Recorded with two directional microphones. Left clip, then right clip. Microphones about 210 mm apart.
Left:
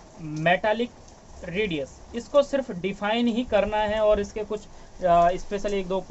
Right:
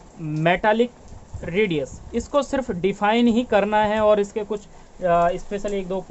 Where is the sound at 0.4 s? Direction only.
50° right (ahead or behind).